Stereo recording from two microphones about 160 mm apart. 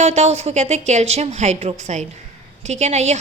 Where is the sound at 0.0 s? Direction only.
45° right (ahead or behind).